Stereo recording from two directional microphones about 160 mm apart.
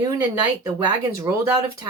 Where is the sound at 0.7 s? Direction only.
20° right (ahead or behind).